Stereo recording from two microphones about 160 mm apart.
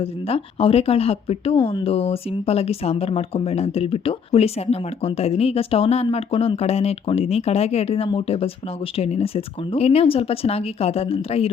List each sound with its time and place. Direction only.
0.0 s speech: 35° left (ahead or behind)